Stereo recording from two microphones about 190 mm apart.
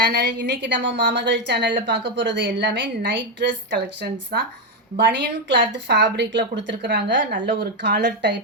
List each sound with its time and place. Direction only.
0.0 s a woman's voice: 60° right (ahead or behind)